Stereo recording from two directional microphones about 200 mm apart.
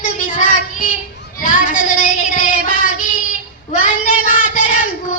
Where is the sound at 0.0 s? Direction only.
40° left (ahead or behind).